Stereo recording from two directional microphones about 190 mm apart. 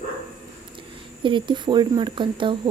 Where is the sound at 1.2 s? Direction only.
25° right (ahead or behind).